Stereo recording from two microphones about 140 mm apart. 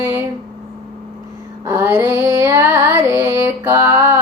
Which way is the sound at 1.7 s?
20° right (ahead or behind).